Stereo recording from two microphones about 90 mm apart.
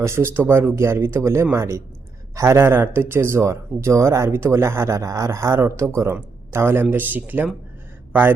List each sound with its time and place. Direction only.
0.0 s a man's voice: 30° right (ahead or behind)